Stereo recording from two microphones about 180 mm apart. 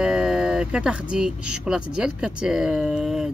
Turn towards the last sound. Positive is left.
turn(degrees=-5)  # may be behind; listen again after turning